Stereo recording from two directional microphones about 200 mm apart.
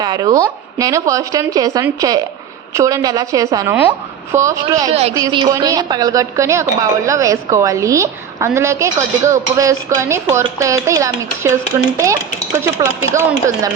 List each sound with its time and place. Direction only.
0.0 s a woman's voice: 20° right (ahead or behind)
4.9 s a woman's voice: 30° right (ahead or behind)
5.1 s a woman's voice: 20° right (ahead or behind)